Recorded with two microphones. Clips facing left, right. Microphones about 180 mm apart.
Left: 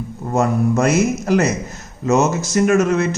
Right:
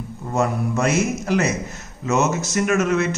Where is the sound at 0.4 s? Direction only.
40° left (ahead or behind).